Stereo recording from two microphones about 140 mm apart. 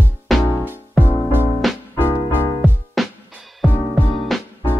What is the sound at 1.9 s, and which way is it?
Music, 15° left (ahead or behind).